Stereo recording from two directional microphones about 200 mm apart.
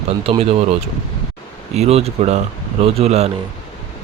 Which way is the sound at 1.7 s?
30° right (ahead or behind).